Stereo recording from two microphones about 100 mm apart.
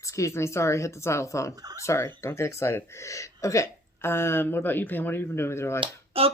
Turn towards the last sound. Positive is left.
turn(degrees=-70)  # may be behind; listen again after turning